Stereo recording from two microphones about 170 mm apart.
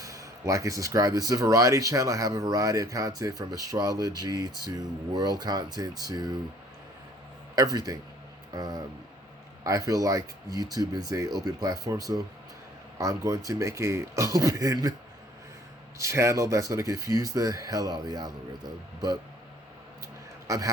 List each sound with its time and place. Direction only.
0.0 s speech: 20° right (ahead or behind)
7.5 s a man's voice: 20° right (ahead or behind)
16.0 s speech: 15° right (ahead or behind)